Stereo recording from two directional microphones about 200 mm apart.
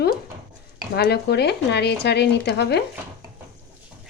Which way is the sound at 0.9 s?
55° left (ahead or behind).